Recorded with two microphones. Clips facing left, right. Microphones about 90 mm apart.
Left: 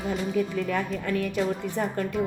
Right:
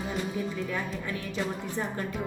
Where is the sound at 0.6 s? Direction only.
70° left (ahead or behind).